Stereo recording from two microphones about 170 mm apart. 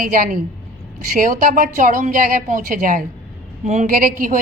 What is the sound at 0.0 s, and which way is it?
A woman's voice, 55° right (ahead or behind).